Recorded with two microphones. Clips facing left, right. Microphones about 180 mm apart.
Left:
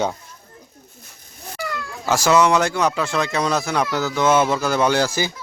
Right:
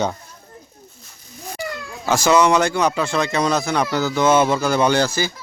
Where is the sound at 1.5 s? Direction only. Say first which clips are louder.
Even; 20° right (ahead or behind).